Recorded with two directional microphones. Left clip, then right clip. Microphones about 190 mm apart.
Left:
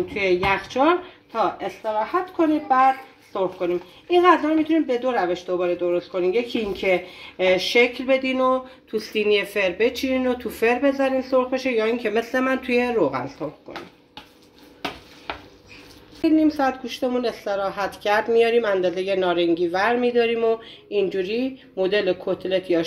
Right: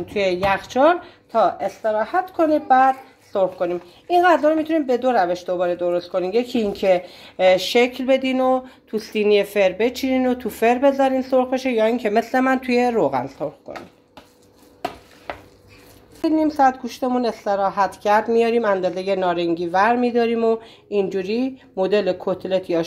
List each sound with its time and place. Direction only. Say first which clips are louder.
0.1 s a woman's voice: right 3 dB; 60° right (ahead or behind)
16.2 s a woman's voice: right 2 dB; 55° right (ahead or behind)